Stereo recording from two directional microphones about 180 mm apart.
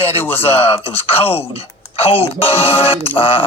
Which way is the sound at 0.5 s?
30° left (ahead or behind).